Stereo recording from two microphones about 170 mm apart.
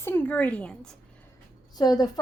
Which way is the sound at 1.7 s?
25° left (ahead or behind).